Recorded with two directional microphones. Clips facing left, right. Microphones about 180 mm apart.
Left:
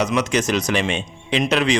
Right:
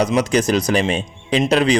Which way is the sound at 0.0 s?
35° right (ahead or behind).